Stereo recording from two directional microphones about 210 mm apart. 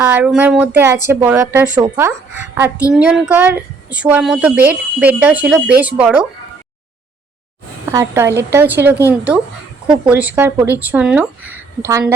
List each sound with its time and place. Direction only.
0.0 s a woman's voice: 10° right (ahead or behind)
7.9 s a woman's voice: 10° right (ahead or behind)